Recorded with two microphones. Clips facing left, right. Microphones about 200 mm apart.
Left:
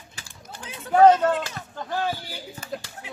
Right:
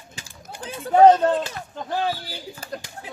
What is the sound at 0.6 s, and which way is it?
Speech, 35° right (ahead or behind).